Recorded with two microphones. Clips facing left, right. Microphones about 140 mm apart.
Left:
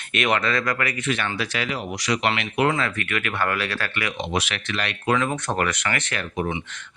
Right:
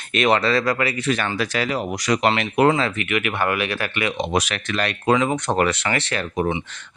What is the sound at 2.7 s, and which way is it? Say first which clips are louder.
Speech: right 4 dB; 25° right (ahead or behind).